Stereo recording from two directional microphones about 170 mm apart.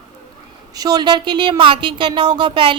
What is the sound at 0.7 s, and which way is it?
Speech, 25° right (ahead or behind).